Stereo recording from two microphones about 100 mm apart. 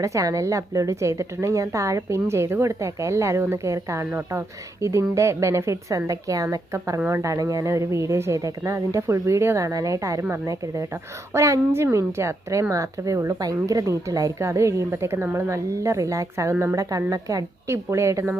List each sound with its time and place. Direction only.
0.0 s speech: 30° right (ahead or behind)